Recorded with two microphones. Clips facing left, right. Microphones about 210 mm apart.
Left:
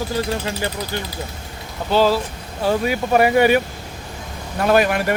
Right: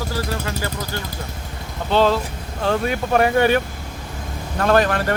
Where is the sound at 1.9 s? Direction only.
5° left (ahead or behind).